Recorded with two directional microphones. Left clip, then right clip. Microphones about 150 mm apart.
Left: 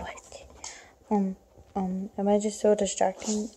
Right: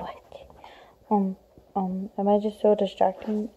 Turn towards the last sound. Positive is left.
turn(degrees=-5)  # may be behind; listen again after turning